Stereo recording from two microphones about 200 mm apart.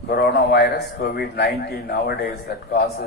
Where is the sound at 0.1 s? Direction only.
55° left (ahead or behind).